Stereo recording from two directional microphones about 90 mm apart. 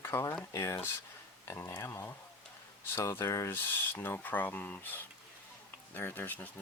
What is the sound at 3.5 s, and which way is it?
Speech, 25° left (ahead or behind).